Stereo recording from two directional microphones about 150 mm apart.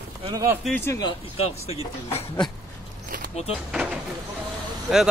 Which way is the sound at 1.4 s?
45° left (ahead or behind).